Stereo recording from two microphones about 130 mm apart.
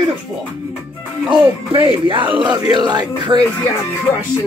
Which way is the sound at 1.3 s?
40° right (ahead or behind).